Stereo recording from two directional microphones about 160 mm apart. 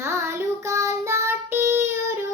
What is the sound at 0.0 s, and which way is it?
Child singing, 15° right (ahead or behind).